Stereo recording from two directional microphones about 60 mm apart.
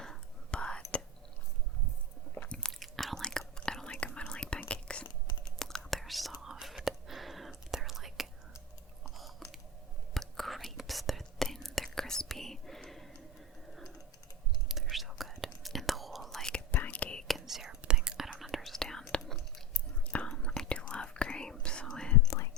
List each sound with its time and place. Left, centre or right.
0.5 s whispering: centre
2.5 s biting: centre
2.7 s whispering: centre
3.2 s whispering: centre
5.5 s whispering: centre
9.4 s a sound: centre
10.2 s whispering: centre
14.7 s whispering: centre
16.7 s whispering: left
17.2 s whispering: centre
19.2 s chewing: centre
20.1 s whispering: centre